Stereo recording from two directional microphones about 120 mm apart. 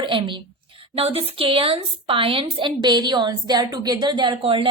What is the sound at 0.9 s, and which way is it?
A woman's voice, 55° right (ahead or behind).